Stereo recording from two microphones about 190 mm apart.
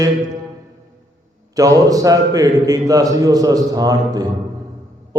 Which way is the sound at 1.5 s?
20° right (ahead or behind).